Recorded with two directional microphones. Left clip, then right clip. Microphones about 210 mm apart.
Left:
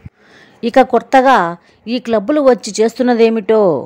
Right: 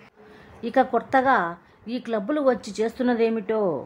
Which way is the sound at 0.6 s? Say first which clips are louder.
Left 11 dB; 40° left (ahead or behind).